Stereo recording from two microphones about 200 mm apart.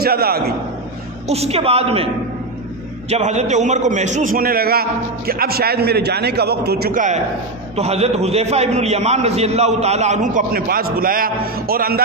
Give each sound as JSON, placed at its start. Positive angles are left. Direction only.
{"t": 0.0, "sound": "a man's voice", "side_deg": -50}
{"t": 1.2, "sound": "a woman's voice", "side_deg": -30}
{"t": 3.1, "sound": "a man's voice", "side_deg": -35}